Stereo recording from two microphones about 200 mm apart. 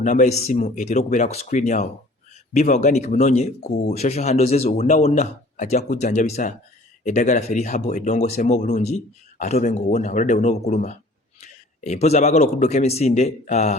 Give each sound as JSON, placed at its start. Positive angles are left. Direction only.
{"t": 0.0, "sound": "speech", "side_deg": 40}